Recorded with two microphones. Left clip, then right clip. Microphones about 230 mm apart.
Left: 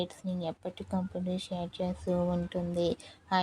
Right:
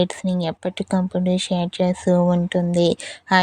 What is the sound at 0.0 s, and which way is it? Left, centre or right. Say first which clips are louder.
Speech: right 13 dB; right.